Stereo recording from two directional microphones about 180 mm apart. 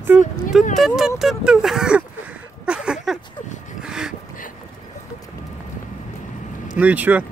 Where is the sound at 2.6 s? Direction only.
5° right (ahead or behind).